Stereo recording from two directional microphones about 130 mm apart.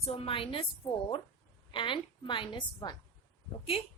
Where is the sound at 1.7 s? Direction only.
40° left (ahead or behind).